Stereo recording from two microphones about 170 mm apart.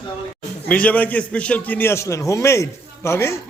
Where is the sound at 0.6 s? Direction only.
10° left (ahead or behind).